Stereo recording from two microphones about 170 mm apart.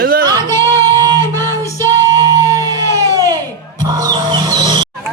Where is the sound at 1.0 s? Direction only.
20° right (ahead or behind).